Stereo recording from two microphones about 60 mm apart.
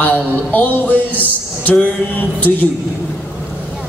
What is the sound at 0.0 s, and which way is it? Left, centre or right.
A man's voice, left.